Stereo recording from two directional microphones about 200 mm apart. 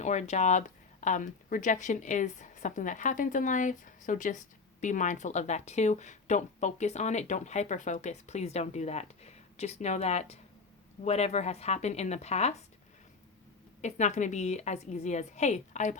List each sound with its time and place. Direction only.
0.0 s speech: 35° left (ahead or behind)
13.8 s speech: 35° left (ahead or behind)